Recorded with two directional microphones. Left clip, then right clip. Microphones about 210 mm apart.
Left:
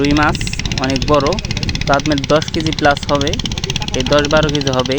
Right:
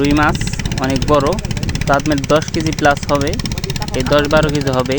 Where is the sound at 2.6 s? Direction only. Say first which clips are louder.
Left 1 dB; 20° left (ahead or behind).